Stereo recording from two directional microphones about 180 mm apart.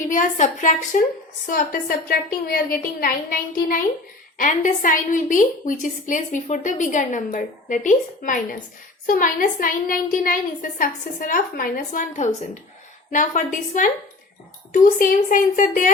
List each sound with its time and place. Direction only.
0.1 s a woman's voice: 45° left (ahead or behind)